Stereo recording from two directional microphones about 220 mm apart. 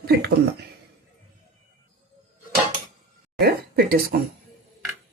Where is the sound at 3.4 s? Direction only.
45° right (ahead or behind).